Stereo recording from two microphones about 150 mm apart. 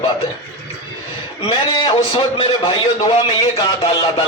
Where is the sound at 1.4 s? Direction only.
30° left (ahead or behind).